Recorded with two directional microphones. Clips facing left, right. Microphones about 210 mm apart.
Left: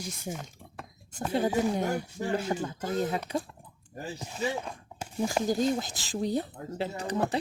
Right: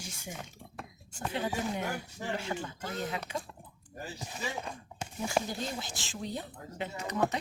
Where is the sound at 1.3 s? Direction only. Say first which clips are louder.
Left 7 dB; 40° left (ahead or behind).